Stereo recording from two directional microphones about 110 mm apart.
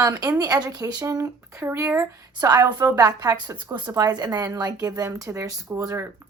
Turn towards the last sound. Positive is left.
turn(degrees=-30)  # may be behind; listen again after turning